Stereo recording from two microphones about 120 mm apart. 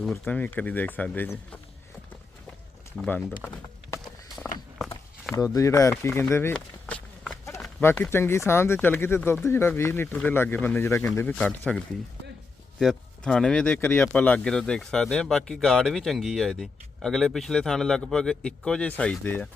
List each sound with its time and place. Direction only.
0.3 s speech: 15° left (ahead or behind)
3.4 s speech: 20° left (ahead or behind)
5.3 s speech: 25° left (ahead or behind)
6.5 s run: 10° left (ahead or behind)
7.8 s speech: 20° left (ahead or behind)
11.3 s speech: 10° left (ahead or behind)
12.8 s speech: 5° left (ahead or behind)